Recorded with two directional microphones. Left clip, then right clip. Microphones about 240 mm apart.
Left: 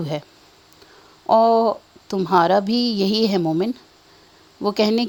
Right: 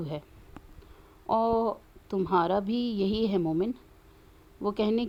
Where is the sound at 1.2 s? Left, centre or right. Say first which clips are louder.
Left 11 dB; left.